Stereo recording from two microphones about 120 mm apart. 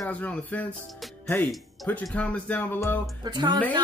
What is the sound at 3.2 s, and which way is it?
Speech, 35° right (ahead or behind).